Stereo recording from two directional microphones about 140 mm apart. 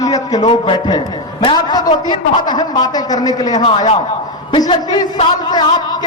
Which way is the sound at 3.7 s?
40° left (ahead or behind).